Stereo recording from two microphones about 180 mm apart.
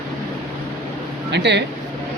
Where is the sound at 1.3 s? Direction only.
75° right (ahead or behind).